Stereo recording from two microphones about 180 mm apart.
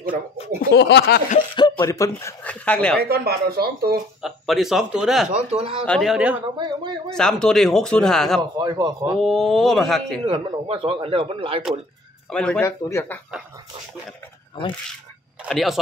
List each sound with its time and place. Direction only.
0.0 s chuckle: 50° right (ahead or behind)
0.6 s a sound: 65° left (ahead or behind)
1.5 s speech: 25° left (ahead or behind); by 3.0 s 5° left (ahead or behind)
3.0 s speech: 60° right (ahead or behind)
4.2 s speech: centre (ahead or behind)
5.5 s speech: 35° right (ahead or behind)
5.9 s speech: centre (ahead or behind)
6.6 s speech: 25° right (ahead or behind)
7.1 s speech: 5° left (ahead or behind)
8.4 s speech: 20° right (ahead or behind)
9.2 s speech: centre (ahead or behind)
10.2 s speech: 30° right (ahead or behind)
12.3 s speech: 5° left (ahead or behind)
15.4 s speech: centre (ahead or behind)